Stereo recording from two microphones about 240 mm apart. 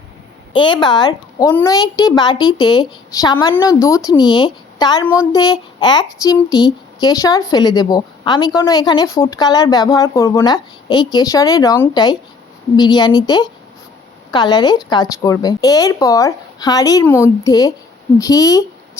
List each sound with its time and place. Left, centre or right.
0.5 s a woman's voice: centre